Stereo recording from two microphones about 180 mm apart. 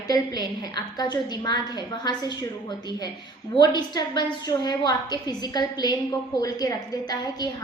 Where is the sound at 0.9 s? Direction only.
25° left (ahead or behind).